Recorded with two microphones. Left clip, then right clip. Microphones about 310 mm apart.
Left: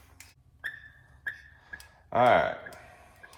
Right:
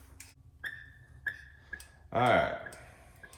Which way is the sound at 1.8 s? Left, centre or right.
Centre.